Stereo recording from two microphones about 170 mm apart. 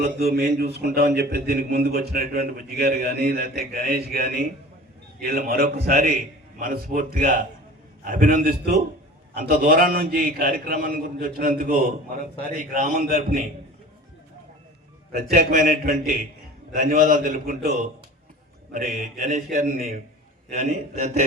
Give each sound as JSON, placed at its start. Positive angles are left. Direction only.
{"t": 0.0, "sound": "a man's voice", "side_deg": -65}
{"t": 15.1, "sound": "a man's voice", "side_deg": -60}
{"t": 19.3, "sound": "a man's voice", "side_deg": -45}